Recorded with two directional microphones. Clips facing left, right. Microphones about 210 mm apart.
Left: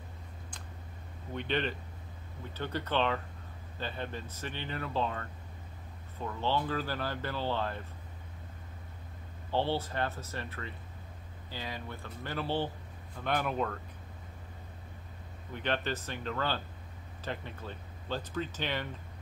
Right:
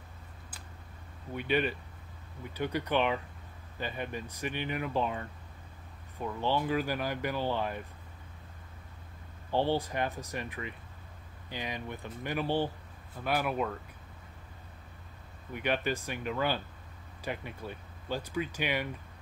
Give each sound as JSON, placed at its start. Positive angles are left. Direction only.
{"t": 1.3, "sound": "speech", "side_deg": -10}
{"t": 9.5, "sound": "speech", "side_deg": -15}
{"t": 15.5, "sound": "speech", "side_deg": -10}